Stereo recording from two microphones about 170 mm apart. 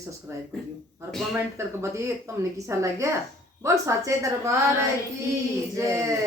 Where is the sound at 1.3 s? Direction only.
15° right (ahead or behind).